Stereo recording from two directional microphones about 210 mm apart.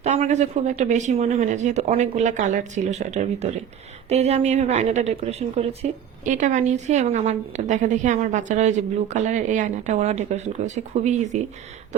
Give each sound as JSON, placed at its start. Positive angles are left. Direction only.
{"t": 0.0, "sound": "a woman's voice", "side_deg": -35}